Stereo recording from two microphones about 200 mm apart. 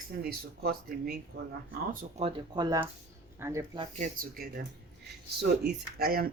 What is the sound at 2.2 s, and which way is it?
Speech, 25° right (ahead or behind).